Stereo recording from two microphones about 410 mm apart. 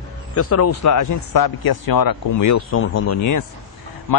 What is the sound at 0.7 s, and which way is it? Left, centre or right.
Speech, left.